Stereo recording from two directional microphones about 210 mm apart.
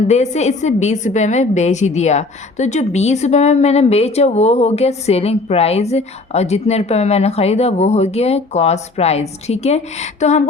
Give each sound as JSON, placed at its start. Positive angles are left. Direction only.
{"t": 0.1, "sound": "a woman's voice", "side_deg": 35}